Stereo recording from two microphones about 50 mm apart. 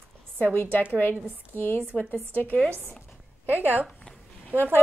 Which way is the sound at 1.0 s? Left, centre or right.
Left.